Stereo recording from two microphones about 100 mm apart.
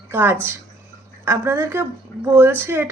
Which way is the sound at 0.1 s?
20° right (ahead or behind).